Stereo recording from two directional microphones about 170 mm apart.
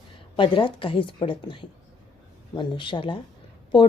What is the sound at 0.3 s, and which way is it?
A woman's voice, 30° left (ahead or behind).